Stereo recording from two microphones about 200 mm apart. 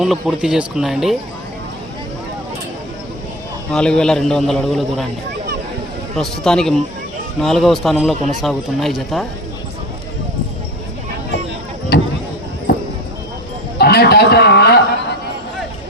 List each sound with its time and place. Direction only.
0.0 s a man's voice: centre (ahead or behind)
3.7 s a man's voice: 5° left (ahead or behind)
6.1 s a man's voice: 5° left (ahead or behind)
11.9 s a sound: 50° left (ahead or behind)